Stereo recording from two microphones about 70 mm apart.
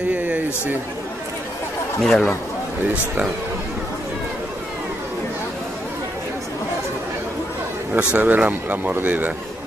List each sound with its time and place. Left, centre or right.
0.1 s a sound: right
2.0 s speech: centre
7.9 s speech: right